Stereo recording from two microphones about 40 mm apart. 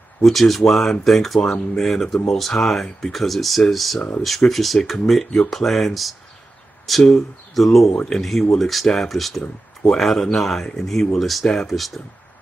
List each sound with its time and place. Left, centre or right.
0.2 s speech: centre
7.9 s speech: left
8.2 s speech: centre